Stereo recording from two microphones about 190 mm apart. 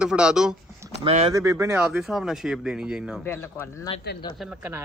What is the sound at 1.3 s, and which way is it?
A woman's voice, 15° right (ahead or behind).